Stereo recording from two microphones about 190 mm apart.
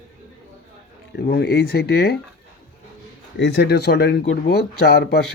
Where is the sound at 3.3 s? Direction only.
65° left (ahead or behind).